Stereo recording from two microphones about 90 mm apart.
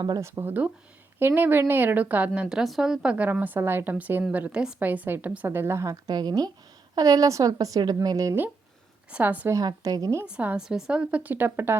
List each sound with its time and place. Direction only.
0.2 s a woman's voice: 30° right (ahead or behind)
6.1 s a woman's voice: 50° right (ahead or behind)
9.0 s a woman's voice: 15° right (ahead or behind)
9.6 s a woman's voice: 45° right (ahead or behind)
10.2 s a woman's voice: 15° right (ahead or behind)